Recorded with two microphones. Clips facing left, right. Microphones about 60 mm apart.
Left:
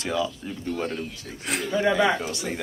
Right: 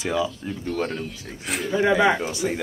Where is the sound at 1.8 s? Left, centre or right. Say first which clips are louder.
Right 3 dB; centre.